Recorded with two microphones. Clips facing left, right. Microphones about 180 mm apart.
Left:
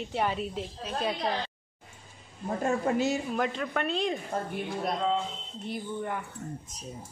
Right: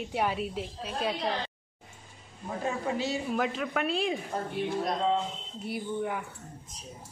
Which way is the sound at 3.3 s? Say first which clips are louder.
Even; 5° right (ahead or behind).